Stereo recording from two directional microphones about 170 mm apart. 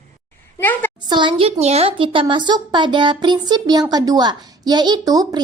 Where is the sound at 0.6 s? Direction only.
10° left (ahead or behind).